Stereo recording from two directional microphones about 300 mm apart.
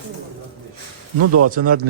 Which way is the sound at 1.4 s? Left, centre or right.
Right.